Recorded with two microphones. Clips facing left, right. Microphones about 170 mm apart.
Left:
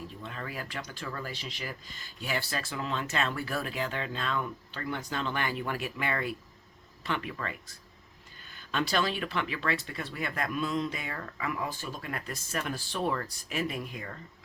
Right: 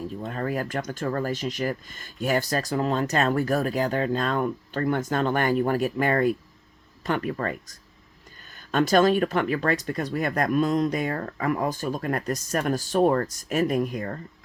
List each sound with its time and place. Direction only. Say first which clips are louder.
0.2 s speech: right 12 dB; 45° right (ahead or behind)